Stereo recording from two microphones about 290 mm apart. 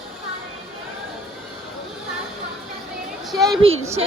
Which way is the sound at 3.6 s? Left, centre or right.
Centre.